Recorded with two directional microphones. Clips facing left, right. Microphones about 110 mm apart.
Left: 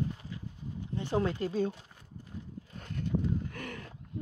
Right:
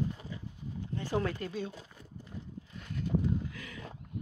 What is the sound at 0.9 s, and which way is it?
Speech, 20° left (ahead or behind).